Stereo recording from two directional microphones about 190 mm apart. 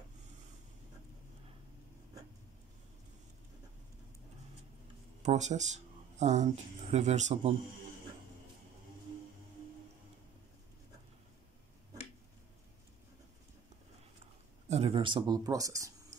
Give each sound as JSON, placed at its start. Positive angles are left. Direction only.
{"t": 5.2, "sound": "speech", "side_deg": -40}
{"t": 14.7, "sound": "speech", "side_deg": -35}